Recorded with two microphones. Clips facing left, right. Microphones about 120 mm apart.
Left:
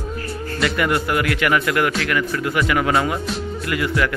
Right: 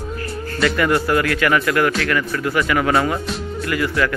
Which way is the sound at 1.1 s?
20° left (ahead or behind).